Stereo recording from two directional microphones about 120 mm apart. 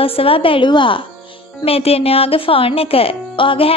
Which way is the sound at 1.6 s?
55° left (ahead or behind).